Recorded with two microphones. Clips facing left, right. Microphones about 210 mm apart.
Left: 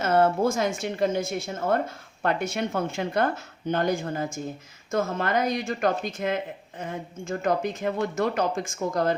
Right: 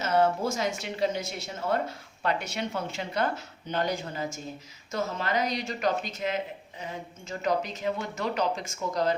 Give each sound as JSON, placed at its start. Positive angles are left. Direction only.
{"t": 0.0, "sound": "speech", "side_deg": 55}